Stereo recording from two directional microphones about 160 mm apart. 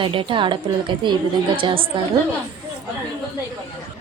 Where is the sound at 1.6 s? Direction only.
35° right (ahead or behind).